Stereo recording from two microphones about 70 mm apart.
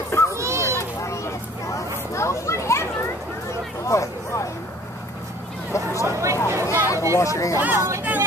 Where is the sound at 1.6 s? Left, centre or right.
Left.